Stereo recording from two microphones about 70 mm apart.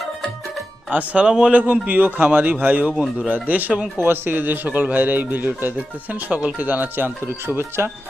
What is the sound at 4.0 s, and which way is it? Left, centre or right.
A man's voice, right.